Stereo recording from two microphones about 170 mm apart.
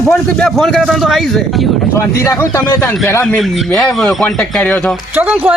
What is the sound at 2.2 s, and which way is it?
Speech, 20° left (ahead or behind).